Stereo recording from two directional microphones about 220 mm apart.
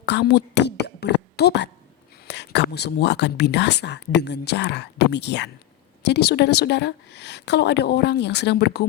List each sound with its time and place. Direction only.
0.0 s speech: 50° left (ahead or behind)